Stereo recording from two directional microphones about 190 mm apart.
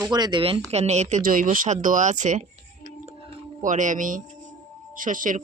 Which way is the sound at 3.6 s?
40° right (ahead or behind).